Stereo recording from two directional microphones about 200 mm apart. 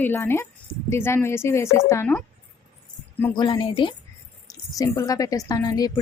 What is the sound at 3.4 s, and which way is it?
A woman's voice, 20° left (ahead or behind).